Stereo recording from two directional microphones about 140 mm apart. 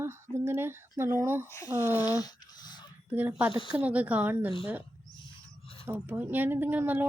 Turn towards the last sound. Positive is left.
turn(degrees=-15)  # may be behind; listen again after turning